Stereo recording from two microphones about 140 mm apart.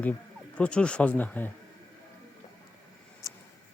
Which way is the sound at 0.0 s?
10° left (ahead or behind).